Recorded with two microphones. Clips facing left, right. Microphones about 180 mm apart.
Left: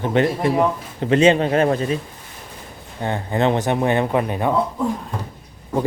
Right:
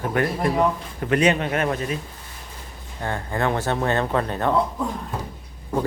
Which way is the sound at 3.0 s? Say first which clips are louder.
Left 5 dB; 20° left (ahead or behind).